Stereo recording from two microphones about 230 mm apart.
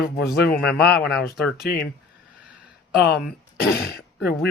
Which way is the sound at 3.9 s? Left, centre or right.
Left.